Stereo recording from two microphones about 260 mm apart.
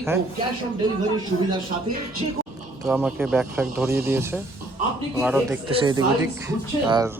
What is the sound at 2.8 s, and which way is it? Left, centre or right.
A man's voice, centre.